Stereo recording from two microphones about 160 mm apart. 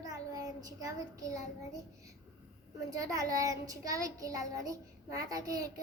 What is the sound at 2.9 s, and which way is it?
Child singing, 20° right (ahead or behind).